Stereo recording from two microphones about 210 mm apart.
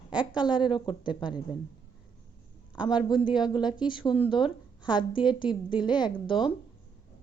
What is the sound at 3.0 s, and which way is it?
A woman's voice, 20° left (ahead or behind).